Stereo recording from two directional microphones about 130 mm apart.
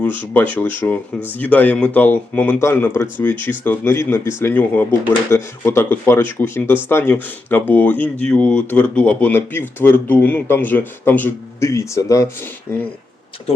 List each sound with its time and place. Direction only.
0.0 s speech: 15° left (ahead or behind)